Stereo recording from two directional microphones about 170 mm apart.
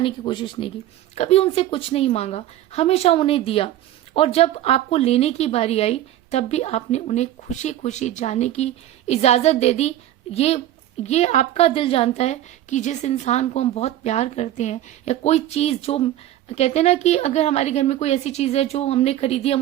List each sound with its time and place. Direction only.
0.0 s a woman's voice: 30° left (ahead or behind)